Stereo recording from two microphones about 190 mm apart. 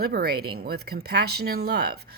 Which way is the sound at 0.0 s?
55° right (ahead or behind).